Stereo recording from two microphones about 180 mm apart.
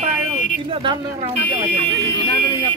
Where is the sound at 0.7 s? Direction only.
30° right (ahead or behind).